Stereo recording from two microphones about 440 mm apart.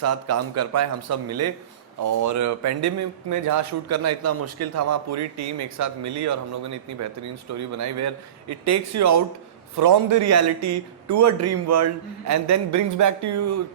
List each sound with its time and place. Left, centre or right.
0.0 s a man's voice: right